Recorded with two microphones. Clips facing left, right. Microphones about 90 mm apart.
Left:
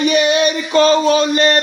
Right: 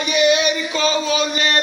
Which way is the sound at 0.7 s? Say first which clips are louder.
Left 10 dB; 50° left (ahead or behind).